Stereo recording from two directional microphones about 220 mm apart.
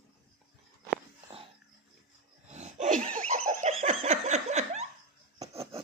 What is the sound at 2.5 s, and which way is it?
Laughter, 30° right (ahead or behind).